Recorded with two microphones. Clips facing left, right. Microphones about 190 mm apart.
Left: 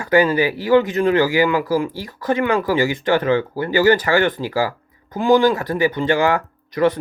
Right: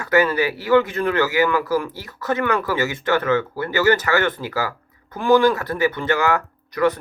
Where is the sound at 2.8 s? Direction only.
30° left (ahead or behind).